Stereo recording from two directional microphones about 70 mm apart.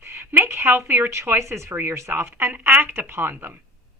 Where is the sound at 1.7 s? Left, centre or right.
Right.